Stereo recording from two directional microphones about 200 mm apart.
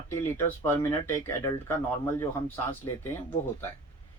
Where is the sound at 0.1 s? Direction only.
15° left (ahead or behind).